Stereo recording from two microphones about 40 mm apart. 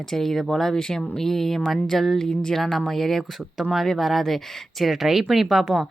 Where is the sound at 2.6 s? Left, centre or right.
Centre.